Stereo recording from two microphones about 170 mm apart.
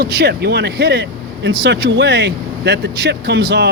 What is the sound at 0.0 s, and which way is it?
Speech, 70° right (ahead or behind).